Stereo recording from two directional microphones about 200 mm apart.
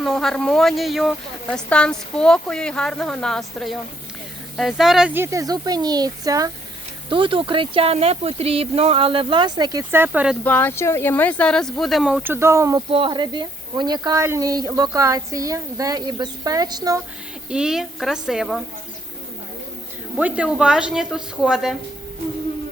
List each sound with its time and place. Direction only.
0.0 s speech: centre (ahead or behind)
10.4 s speech: 10° left (ahead or behind); by 17.0 s 20° right (ahead or behind)
17.5 s speech: 5° right (ahead or behind)
20.1 s speech: 5° right (ahead or behind)